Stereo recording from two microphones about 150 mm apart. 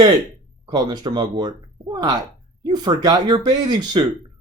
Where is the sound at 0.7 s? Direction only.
30° right (ahead or behind).